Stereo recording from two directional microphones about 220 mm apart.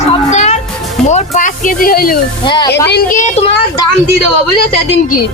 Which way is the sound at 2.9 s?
40° left (ahead or behind).